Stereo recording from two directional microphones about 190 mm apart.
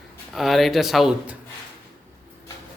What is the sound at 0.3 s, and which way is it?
Speech, centre (ahead or behind).